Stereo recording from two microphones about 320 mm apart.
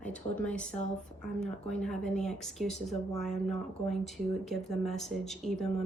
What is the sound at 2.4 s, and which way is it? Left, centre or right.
Speech, centre.